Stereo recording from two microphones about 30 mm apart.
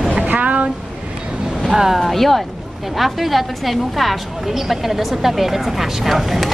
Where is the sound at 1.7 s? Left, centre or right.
Centre.